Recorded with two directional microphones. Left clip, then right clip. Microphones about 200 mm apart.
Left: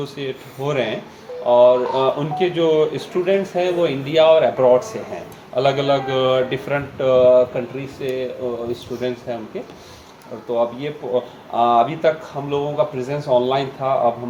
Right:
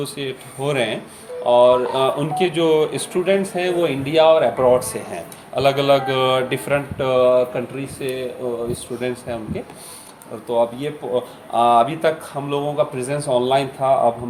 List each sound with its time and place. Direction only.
0.0 s speech: 30° right (ahead or behind)
10.5 s speech: 35° right (ahead or behind)